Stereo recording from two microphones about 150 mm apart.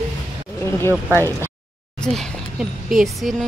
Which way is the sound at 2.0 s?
Centre (ahead or behind).